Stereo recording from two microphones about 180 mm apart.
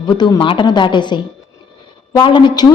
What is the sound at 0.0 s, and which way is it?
A woman's voice, 25° left (ahead or behind).